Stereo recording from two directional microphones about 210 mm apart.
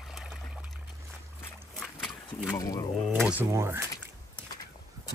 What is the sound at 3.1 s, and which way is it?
Speech, 5° right (ahead or behind).